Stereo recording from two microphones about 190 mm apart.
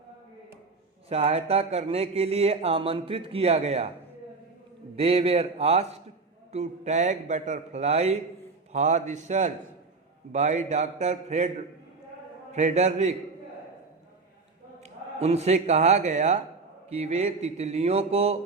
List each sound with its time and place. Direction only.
1.1 s speech: 30° right (ahead or behind)
4.9 s speech: 30° right (ahead or behind)
14.8 s speech: 35° right (ahead or behind)